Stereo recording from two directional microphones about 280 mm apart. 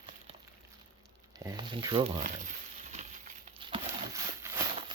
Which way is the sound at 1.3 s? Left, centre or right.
Centre.